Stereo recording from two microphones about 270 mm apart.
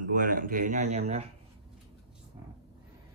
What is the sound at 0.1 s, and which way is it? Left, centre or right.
Speech, right.